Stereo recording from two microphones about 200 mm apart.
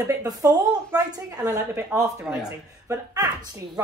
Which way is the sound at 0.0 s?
15° right (ahead or behind).